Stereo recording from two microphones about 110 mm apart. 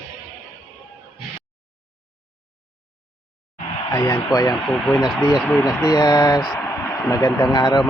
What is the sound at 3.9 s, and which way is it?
Speech, 30° left (ahead or behind).